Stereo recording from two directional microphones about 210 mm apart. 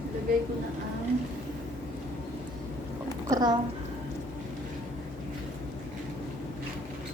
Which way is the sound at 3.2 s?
20° right (ahead or behind).